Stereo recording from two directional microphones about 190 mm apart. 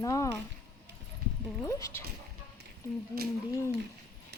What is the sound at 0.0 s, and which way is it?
Speech, 15° left (ahead or behind).